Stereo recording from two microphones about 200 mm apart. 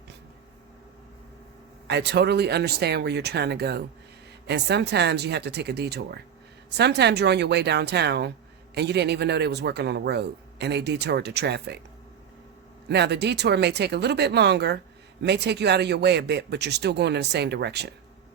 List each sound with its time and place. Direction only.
1.9 s speech: 60° right (ahead or behind)
12.9 s speech: 55° right (ahead or behind)